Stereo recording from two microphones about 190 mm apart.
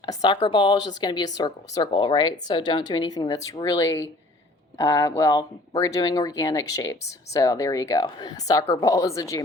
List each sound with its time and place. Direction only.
0.0 s speech: 20° left (ahead or behind)